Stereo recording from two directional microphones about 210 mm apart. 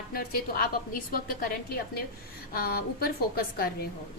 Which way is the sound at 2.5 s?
45° left (ahead or behind).